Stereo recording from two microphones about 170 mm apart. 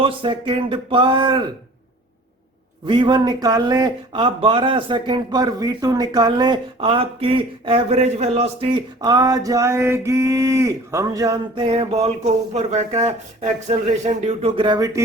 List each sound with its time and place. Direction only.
0.0 s speech: 30° right (ahead or behind)
2.8 s speech: 25° right (ahead or behind)